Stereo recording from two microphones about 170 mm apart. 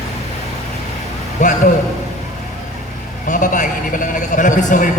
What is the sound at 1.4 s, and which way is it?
Speech, 45° left (ahead or behind).